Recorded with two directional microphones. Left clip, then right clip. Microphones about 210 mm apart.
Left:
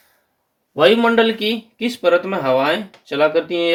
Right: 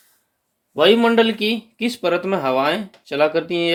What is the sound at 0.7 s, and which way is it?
Speech, 40° right (ahead or behind).